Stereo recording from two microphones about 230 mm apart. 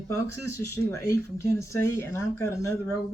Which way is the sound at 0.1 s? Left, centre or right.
Centre.